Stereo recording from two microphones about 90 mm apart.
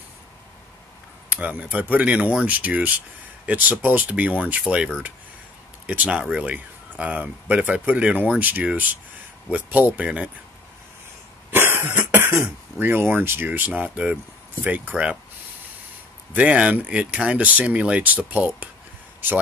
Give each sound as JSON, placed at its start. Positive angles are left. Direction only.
{"t": 1.3, "sound": "speech", "side_deg": -15}
{"t": 11.5, "sound": "cough", "side_deg": -25}
{"t": 12.7, "sound": "speech", "side_deg": -25}
{"t": 16.3, "sound": "speech", "side_deg": -15}